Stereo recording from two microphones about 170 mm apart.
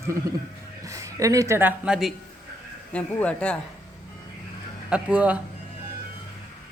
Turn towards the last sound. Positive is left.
turn(degrees=-10)  # may be behind; listen again after turning